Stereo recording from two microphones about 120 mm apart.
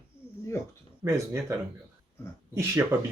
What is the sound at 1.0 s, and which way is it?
Speech, 25° right (ahead or behind).